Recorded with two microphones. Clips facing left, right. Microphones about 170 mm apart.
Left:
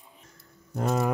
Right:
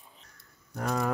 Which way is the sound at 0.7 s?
20° left (ahead or behind).